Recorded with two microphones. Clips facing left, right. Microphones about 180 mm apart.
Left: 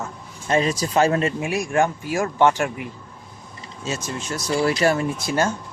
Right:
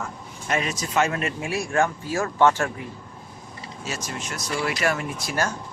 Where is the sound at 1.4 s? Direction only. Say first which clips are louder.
Left 3 dB; 15° left (ahead or behind).